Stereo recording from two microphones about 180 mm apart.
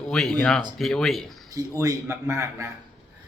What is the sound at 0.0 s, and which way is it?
Speech, 5° left (ahead or behind).